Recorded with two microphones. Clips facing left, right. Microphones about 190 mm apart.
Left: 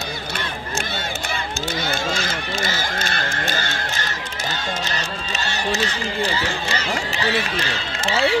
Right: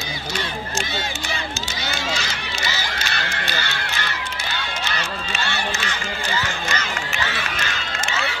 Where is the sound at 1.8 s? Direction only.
50° left (ahead or behind).